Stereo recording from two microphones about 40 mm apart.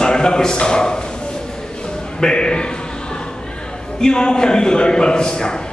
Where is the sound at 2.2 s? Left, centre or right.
Left.